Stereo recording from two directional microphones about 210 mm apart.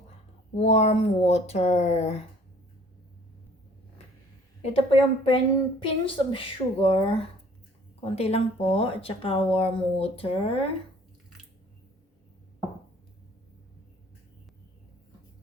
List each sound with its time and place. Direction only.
0.5 s speech: 30° left (ahead or behind)
4.6 s a woman's voice: 25° left (ahead or behind)